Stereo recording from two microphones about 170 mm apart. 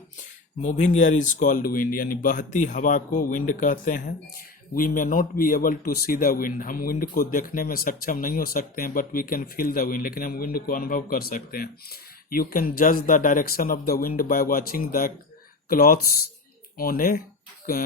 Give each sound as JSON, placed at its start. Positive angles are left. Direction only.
{"t": 0.6, "sound": "speech", "side_deg": 45}